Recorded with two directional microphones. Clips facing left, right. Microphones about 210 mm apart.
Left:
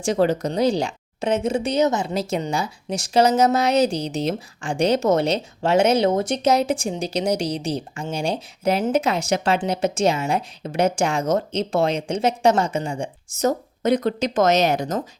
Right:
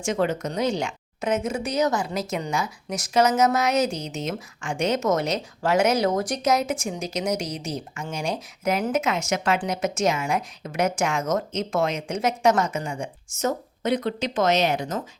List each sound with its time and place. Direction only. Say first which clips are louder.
0.0 s a woman's voice: left 5 dB; 35° left (ahead or behind)